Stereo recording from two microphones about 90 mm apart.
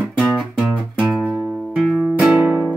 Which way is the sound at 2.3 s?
20° right (ahead or behind).